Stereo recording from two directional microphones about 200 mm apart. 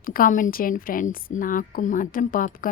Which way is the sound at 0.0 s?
45° left (ahead or behind).